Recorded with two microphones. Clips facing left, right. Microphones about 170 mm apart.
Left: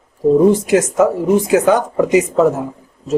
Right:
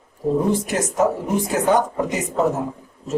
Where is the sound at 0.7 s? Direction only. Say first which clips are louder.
Left 7 dB; 90° left.